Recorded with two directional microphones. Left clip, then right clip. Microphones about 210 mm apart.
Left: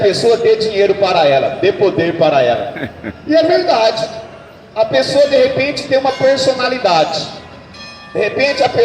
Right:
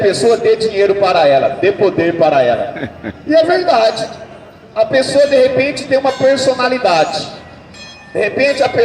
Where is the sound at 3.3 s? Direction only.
50° right (ahead or behind).